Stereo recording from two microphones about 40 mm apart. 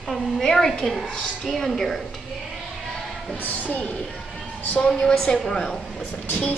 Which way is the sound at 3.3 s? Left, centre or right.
Left.